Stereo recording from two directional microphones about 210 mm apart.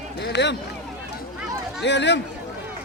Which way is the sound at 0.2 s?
55° left (ahead or behind).